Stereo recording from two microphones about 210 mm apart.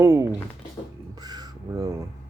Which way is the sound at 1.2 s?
20° right (ahead or behind).